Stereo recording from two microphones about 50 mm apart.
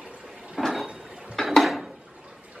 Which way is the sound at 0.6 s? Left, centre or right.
Centre.